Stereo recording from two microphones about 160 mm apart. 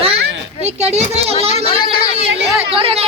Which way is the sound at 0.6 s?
40° right (ahead or behind).